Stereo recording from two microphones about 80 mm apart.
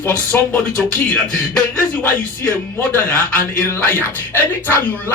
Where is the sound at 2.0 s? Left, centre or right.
Left.